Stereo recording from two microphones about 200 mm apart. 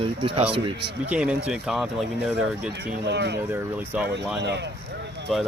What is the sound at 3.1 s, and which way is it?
Speech, 60° right (ahead or behind).